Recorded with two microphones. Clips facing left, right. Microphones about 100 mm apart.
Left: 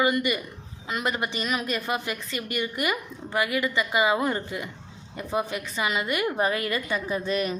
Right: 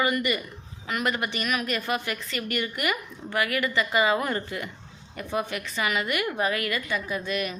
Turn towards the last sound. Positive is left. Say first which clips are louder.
# left 3 dB
turn(degrees=30)  # may be behind; listen again after turning